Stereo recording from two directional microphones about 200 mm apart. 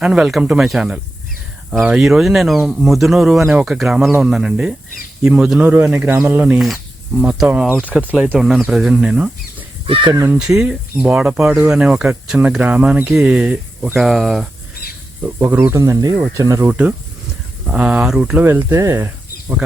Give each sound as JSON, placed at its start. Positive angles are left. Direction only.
{"t": 0.0, "sound": "speech", "side_deg": 0}
{"t": 7.7, "sound": "speech", "side_deg": 10}
{"t": 9.8, "sound": "speech", "side_deg": -25}
{"t": 10.3, "sound": "speech", "side_deg": -5}